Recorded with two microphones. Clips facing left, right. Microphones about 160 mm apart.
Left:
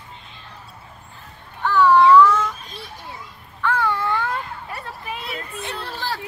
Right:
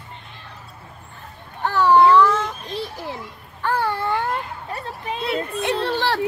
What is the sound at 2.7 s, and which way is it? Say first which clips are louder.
Speech: right 9 dB; 90° right.